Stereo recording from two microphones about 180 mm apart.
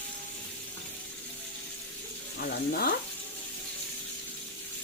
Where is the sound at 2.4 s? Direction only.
55° left (ahead or behind).